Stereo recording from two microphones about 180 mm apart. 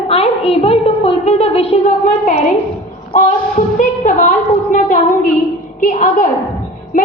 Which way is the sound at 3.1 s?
45° left (ahead or behind).